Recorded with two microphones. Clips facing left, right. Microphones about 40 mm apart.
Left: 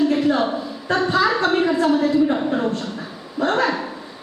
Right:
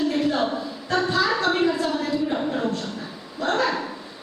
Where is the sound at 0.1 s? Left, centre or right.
Centre.